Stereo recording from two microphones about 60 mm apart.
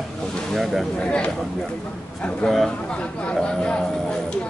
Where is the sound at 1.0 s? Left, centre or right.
Centre.